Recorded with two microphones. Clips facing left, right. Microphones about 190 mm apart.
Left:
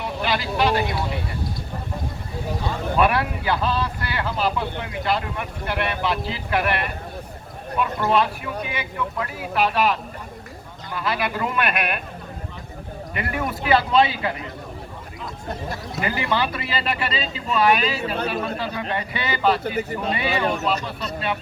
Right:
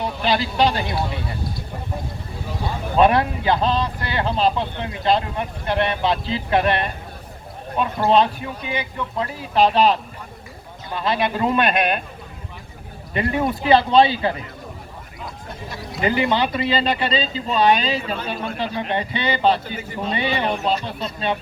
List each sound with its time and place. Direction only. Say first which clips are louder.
0.0 s speech: right 3 dB; 30° right (ahead or behind)
3.0 s a man's voice: right 5 dB; 25° right (ahead or behind)
13.1 s a man's voice: right 6 dB; 25° right (ahead or behind)
16.0 s a man's voice: right 5 dB; 20° right (ahead or behind)